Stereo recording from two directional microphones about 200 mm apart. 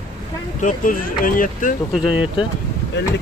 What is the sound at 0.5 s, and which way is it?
Speech, 40° left (ahead or behind).